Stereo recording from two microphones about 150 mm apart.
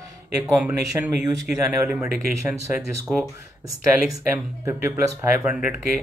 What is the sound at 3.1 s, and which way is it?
Speech, 5° right (ahead or behind).